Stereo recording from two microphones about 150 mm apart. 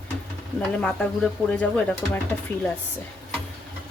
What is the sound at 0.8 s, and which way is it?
Speech, 5° left (ahead or behind).